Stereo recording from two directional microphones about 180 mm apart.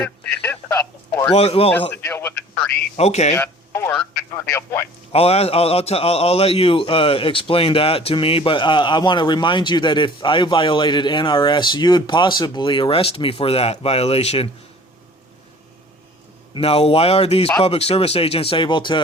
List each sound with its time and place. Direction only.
0.4 s radio: 15° left (ahead or behind)
1.3 s speech: 35° left (ahead or behind)
1.9 s speech: 15° left (ahead or behind)
2.9 s speech: 40° left (ahead or behind)
3.3 s a sound: 15° left (ahead or behind)
4.4 s speech: 15° left (ahead or behind)
5.1 s a man's voice: 35° left (ahead or behind)
16.6 s speech: 35° left (ahead or behind)